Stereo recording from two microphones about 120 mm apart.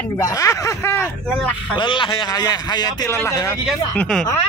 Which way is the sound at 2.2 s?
30° left (ahead or behind).